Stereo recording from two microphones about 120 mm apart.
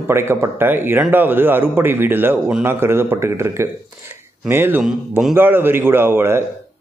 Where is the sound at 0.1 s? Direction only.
20° right (ahead or behind).